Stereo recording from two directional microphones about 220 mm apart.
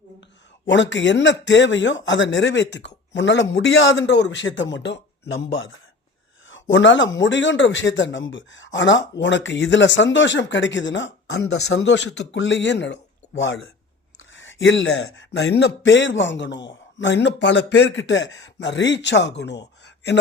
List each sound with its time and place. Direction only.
0.6 s speech: 55° left (ahead or behind)